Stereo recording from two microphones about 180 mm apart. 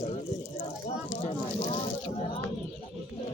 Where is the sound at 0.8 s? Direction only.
35° left (ahead or behind).